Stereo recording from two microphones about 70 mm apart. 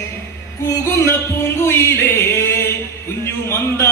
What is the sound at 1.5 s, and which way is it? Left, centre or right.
Music, left.